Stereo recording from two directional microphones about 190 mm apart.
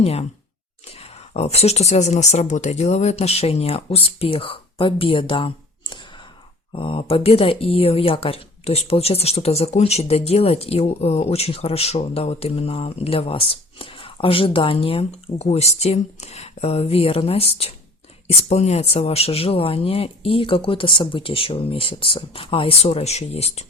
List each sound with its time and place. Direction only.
0.0 s speech: 30° left (ahead or behind)